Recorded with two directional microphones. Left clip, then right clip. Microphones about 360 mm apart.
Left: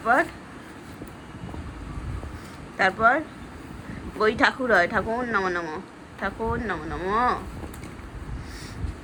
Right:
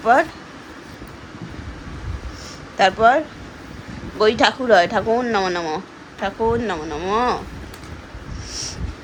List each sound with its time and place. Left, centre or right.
0.0 s speech: centre
2.7 s speech: centre
4.2 s speech: centre